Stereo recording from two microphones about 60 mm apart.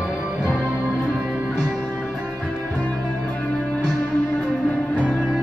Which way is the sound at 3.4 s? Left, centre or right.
Left.